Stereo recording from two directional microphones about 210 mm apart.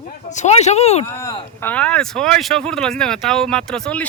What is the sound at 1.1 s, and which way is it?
Speech, 10° left (ahead or behind).